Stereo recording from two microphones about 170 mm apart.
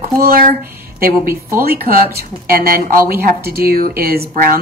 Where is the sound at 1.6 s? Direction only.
60° right (ahead or behind).